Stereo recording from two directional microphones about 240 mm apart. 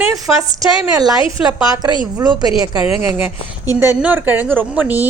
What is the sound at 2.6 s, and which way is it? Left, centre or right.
Speech, left.